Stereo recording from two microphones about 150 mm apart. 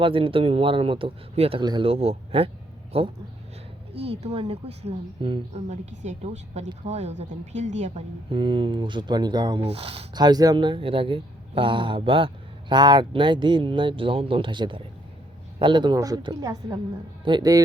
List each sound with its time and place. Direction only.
0.0 s speech: 35° right (ahead or behind)
8.3 s speech: 35° right (ahead or behind)
9.6 s speech: 40° right (ahead or behind)
10.2 s a woman's voice: 25° right (ahead or behind)